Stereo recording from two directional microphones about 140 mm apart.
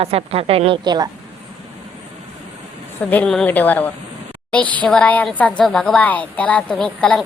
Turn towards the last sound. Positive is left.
turn(degrees=5)  # may be behind; listen again after turning